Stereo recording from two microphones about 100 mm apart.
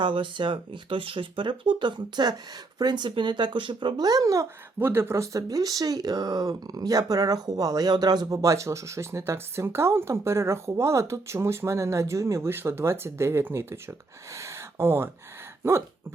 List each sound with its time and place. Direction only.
0.0 s a child's voice: 55° right (ahead or behind); by 4.4 s 35° right (ahead or behind)
4.8 s speech: 20° right (ahead or behind)
14.3 s a sound: 30° right (ahead or behind)
15.6 s speech: 25° right (ahead or behind)